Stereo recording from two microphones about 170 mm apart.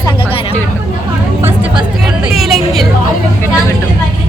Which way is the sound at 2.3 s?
Centre (ahead or behind).